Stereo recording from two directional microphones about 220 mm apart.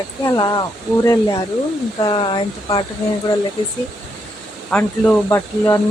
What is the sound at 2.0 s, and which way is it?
Speech, 20° left (ahead or behind).